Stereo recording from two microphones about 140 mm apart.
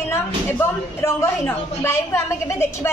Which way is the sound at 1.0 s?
20° left (ahead or behind).